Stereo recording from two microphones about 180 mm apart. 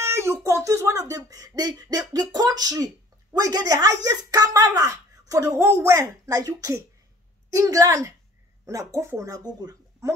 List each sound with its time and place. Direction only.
0.0 s speech: 15° right (ahead or behind)